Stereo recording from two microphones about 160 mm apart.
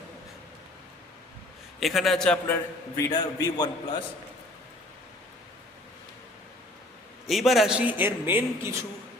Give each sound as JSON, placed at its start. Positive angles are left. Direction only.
{"t": 1.8, "sound": "a man's voice", "side_deg": 0}
{"t": 2.9, "sound": "a man's voice", "side_deg": 20}
{"t": 7.3, "sound": "a man's voice", "side_deg": 0}